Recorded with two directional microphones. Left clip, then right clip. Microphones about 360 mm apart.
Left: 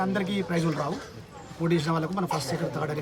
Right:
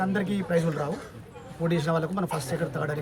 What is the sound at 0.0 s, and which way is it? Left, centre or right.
Speech, centre.